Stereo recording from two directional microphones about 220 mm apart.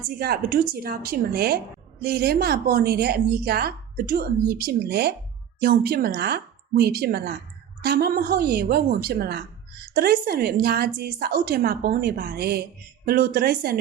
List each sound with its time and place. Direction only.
0.2 s a woman's voice: 40° right (ahead or behind)